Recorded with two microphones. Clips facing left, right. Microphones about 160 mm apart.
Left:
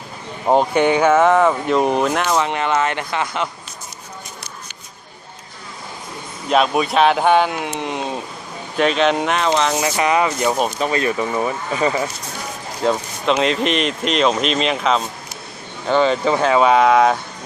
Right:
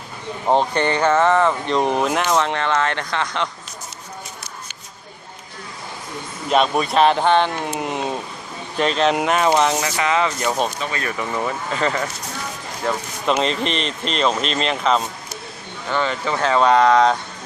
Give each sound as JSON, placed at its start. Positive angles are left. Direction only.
{"t": 0.4, "sound": "speech", "side_deg": 10}
{"t": 6.5, "sound": "speech", "side_deg": 0}
{"t": 9.8, "sound": "speech", "side_deg": 20}
{"t": 10.8, "sound": "speech", "side_deg": 30}
{"t": 11.2, "sound": "speech", "side_deg": 15}
{"t": 13.2, "sound": "speech", "side_deg": 0}
{"t": 15.9, "sound": "speech", "side_deg": 20}